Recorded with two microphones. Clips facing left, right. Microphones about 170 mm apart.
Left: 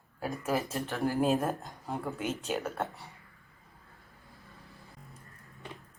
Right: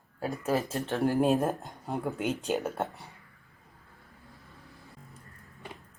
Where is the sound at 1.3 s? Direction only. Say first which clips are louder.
Right 3 dB; centre (ahead or behind).